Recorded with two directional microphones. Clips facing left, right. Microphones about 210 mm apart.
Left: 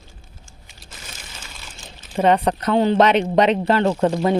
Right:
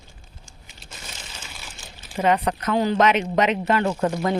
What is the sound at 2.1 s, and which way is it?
A man's voice, 30° left (ahead or behind).